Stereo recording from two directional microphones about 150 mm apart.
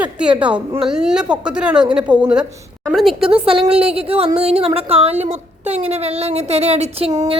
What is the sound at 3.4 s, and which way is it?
A woman's voice, 35° right (ahead or behind).